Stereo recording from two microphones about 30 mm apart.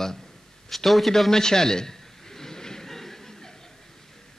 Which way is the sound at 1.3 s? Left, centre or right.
Centre.